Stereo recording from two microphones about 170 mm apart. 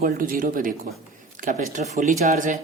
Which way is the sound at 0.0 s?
55° right (ahead or behind).